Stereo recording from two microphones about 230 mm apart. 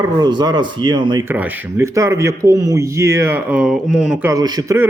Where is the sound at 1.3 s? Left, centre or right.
Centre.